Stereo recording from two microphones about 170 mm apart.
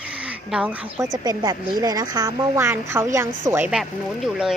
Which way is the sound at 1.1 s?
20° right (ahead or behind).